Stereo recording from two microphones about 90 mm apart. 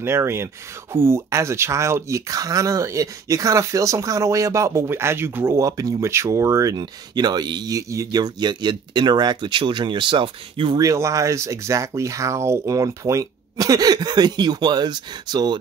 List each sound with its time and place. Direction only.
0.0 s speech: 30° right (ahead or behind)
5.6 s speech: 40° right (ahead or behind); by 10.8 s 70° right (ahead or behind)
10.8 s speech: 35° right (ahead or behind); by 15.6 s 50° right (ahead or behind)